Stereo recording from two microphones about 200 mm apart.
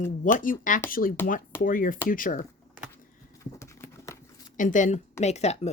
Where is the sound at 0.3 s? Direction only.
45° left (ahead or behind).